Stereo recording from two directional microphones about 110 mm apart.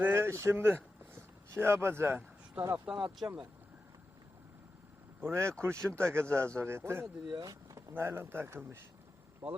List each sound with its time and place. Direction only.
0.0 s speech: 20° right (ahead or behind)
5.2 s speech: 25° right (ahead or behind)
7.3 s speech: 35° right (ahead or behind); by 9.6 s 15° right (ahead or behind)